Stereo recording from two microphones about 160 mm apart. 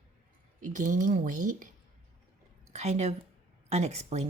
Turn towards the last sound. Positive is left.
turn(degrees=-40)  # may be behind; listen again after turning